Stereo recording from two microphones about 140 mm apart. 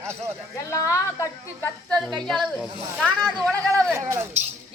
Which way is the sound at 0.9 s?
20° left (ahead or behind).